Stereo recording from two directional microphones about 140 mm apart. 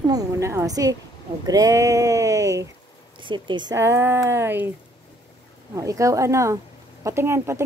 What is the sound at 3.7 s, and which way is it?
Speech, 15° right (ahead or behind).